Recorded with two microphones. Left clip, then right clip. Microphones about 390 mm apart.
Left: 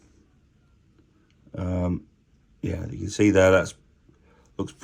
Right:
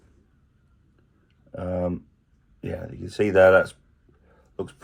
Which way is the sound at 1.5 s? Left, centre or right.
Centre.